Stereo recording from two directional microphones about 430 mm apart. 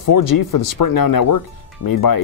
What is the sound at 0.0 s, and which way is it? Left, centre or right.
Speech, left.